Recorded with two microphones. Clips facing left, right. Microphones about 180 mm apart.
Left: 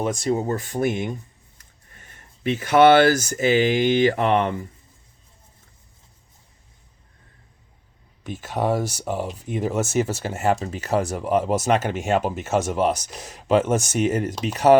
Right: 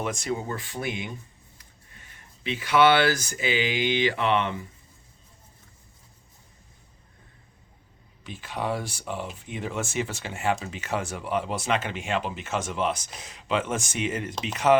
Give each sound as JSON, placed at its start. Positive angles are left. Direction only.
{"t": 0.0, "sound": "speech", "side_deg": 35}
{"t": 8.2, "sound": "speech", "side_deg": 45}